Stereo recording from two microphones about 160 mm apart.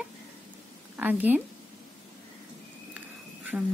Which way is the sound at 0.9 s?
10° right (ahead or behind).